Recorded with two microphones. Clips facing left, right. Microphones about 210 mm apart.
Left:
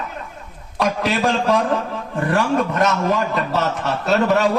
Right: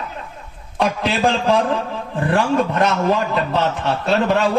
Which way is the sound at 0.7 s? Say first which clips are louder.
Even; 30° right (ahead or behind).